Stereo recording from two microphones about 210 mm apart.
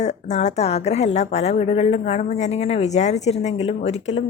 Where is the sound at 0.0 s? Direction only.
35° left (ahead or behind).